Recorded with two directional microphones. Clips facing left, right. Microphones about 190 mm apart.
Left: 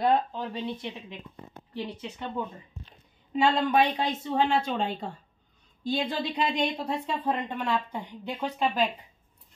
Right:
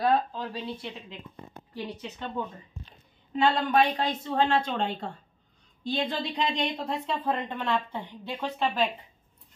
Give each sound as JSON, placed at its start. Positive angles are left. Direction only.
{"t": 0.0, "sound": "speech", "side_deg": 20}